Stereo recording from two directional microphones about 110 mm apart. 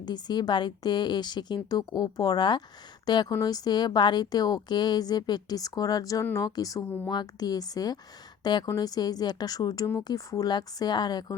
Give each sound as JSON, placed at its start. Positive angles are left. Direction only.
{"t": 0.0, "sound": "a woman's voice", "side_deg": 40}